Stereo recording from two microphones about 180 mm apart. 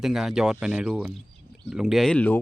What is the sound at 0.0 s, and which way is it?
Speech, centre (ahead or behind).